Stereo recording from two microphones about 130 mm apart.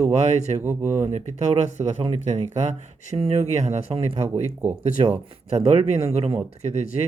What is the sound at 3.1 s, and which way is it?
Speech, 50° right (ahead or behind).